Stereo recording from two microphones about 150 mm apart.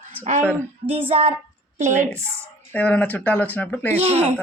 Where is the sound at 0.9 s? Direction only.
40° right (ahead or behind).